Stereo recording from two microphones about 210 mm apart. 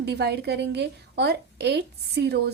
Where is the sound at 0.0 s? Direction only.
50° right (ahead or behind).